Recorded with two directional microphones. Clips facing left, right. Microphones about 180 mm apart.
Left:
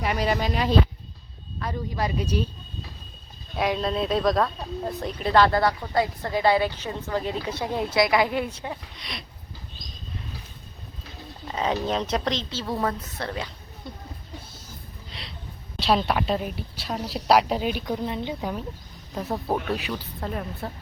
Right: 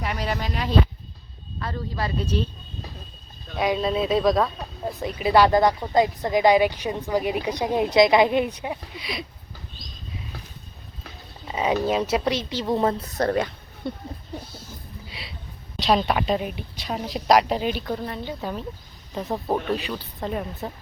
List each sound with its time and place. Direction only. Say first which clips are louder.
0.0 s a woman's voice: left 3 dB; 5° left (ahead or behind)
1.7 s speech: left 1 dB; 15° left (ahead or behind)
3.5 s speech: right 2 dB; centre (ahead or behind)
9.0 s a woman's voice: right 6 dB; 5° right (ahead or behind)
11.4 s speech: right 3 dB; 10° right (ahead or behind); by 13.9 s 55° right (ahead or behind)
15.1 s a sound: left 1 dB; 5° right (ahead or behind)
15.8 s a woman's voice: right 1 dB; centre (ahead or behind)
17.9 s a woman's voice: left 2 dB; 20° left (ahead or behind)
18.3 s speech: even; 10° left (ahead or behind)
19.1 s speech: right 1 dB; 15° right (ahead or behind)
19.7 s a woman's voice: right 2 dB; 10° left (ahead or behind)